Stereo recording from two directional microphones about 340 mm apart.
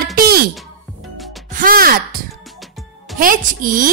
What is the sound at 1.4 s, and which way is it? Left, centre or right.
Speech, right.